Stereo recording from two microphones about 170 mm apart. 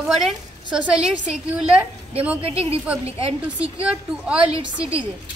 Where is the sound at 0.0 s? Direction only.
Centre (ahead or behind).